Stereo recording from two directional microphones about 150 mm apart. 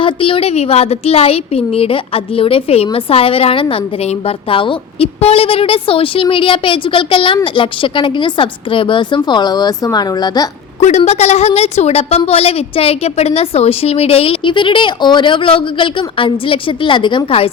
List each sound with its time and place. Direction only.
0.0 s a woman's voice: 35° left (ahead or behind)
10.8 s a woman's voice: 50° left (ahead or behind)